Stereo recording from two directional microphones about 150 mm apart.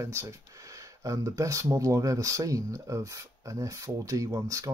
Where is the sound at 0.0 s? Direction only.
20° right (ahead or behind).